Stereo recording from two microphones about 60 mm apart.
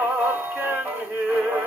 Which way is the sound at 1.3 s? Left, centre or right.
Right.